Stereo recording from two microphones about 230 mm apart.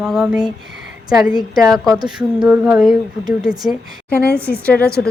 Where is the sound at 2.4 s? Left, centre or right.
Centre.